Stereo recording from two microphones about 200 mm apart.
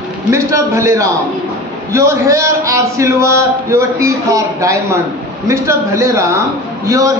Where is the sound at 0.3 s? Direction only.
15° right (ahead or behind).